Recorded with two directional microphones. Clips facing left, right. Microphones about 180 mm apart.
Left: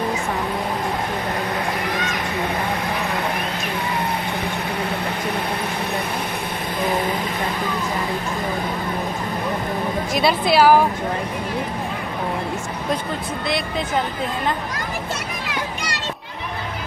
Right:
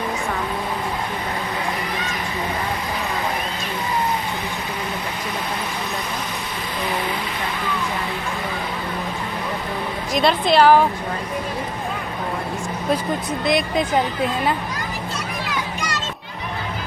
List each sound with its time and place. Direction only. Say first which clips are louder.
10.1 s a woman's voice: right 1 dB; 5° left (ahead or behind)
13.5 s speech: right 5 dB; 15° right (ahead or behind)